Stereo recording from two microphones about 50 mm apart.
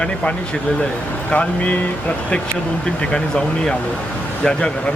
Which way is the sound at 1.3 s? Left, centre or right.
Left.